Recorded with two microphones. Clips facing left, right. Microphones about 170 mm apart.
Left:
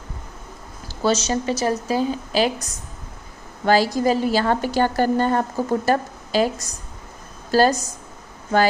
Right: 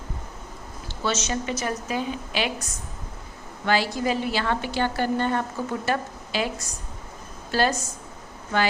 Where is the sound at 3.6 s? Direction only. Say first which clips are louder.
Left 6 dB; 40° left (ahead or behind).